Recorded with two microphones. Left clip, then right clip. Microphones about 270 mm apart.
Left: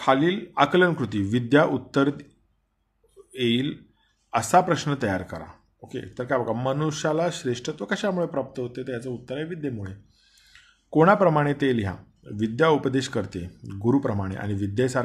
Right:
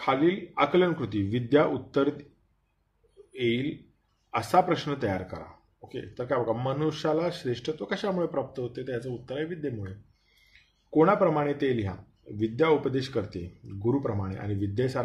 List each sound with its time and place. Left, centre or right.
0.0 s speech: left
3.3 s speech: left